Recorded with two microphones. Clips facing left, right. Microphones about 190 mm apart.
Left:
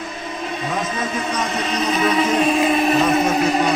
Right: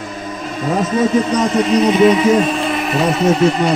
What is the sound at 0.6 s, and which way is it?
Speech, 40° right (ahead or behind).